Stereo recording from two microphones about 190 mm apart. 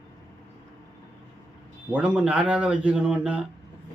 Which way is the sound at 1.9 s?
5° right (ahead or behind).